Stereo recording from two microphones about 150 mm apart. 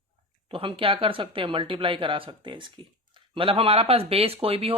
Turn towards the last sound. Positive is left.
turn(degrees=-40)  # may be behind; listen again after turning